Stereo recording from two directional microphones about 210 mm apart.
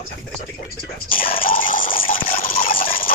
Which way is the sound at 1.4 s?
40° left (ahead or behind).